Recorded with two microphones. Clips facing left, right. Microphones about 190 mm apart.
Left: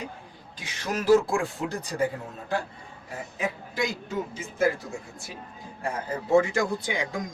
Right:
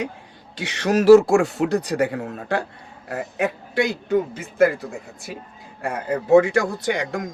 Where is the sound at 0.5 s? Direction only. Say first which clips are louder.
Right 11 dB; 75° right (ahead or behind).